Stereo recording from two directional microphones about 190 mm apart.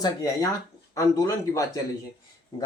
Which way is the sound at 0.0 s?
20° left (ahead or behind).